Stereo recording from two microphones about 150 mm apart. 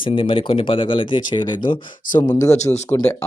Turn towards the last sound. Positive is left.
turn(degrees=20)  # may be behind; listen again after turning